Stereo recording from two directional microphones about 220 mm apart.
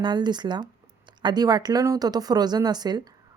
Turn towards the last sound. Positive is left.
turn(degrees=-20)  # may be behind; listen again after turning